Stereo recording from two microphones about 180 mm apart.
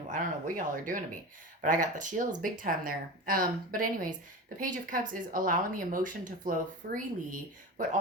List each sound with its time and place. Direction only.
0.1 s speech: 50° right (ahead or behind)